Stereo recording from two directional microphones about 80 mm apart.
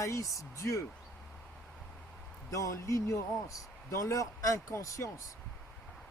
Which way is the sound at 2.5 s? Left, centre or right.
Left.